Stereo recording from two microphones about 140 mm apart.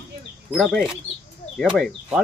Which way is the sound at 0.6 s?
5° left (ahead or behind).